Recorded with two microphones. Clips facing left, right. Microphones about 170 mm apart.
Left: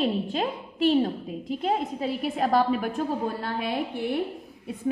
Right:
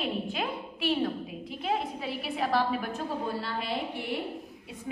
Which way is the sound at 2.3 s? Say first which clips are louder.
Left 4 dB; 45° left (ahead or behind).